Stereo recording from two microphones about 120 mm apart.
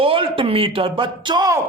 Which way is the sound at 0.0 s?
50° right (ahead or behind).